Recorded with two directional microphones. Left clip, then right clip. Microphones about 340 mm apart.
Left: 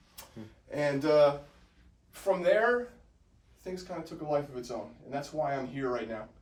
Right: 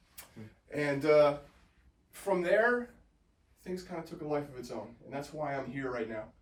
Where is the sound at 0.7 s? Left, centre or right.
Centre.